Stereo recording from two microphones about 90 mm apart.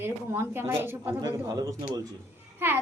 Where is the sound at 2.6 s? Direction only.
25° right (ahead or behind).